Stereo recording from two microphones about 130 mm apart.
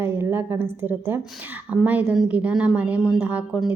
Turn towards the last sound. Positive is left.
turn(degrees=-10)  # may be behind; listen again after turning